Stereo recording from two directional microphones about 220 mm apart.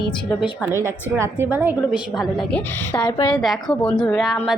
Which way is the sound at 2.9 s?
20° left (ahead or behind).